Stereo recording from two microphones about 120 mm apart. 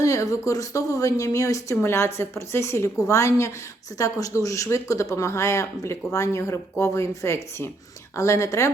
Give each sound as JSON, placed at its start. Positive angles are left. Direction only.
{"t": 0.0, "sound": "speech", "side_deg": 30}